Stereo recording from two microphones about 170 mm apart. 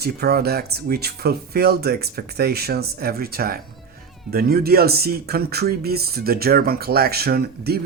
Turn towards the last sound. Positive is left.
turn(degrees=-65)  # may be behind; listen again after turning